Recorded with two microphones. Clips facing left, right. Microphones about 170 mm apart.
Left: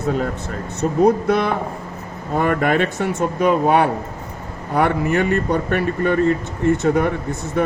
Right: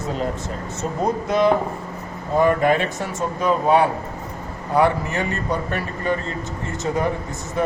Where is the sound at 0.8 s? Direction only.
60° left (ahead or behind).